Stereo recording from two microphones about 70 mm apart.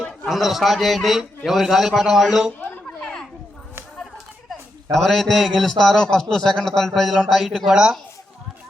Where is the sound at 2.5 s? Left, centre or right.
Left.